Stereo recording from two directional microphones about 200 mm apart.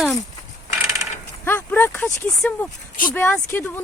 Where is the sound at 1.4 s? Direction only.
10° left (ahead or behind).